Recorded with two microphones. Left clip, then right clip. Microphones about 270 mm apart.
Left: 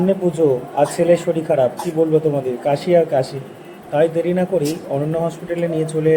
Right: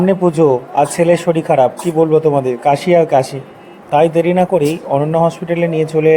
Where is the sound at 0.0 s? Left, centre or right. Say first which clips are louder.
Right 5 dB; right.